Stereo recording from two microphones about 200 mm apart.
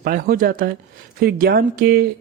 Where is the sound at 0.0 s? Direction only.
50° right (ahead or behind).